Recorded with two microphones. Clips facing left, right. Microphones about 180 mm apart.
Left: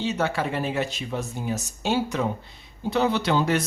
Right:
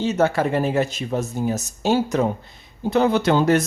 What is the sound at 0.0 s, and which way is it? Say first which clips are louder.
Speech: right 6 dB; 45° right (ahead or behind).